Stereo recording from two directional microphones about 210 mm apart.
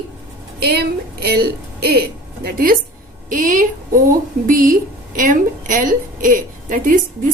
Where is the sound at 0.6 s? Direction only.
50° right (ahead or behind).